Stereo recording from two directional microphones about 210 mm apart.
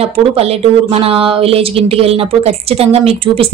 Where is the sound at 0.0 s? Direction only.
30° right (ahead or behind).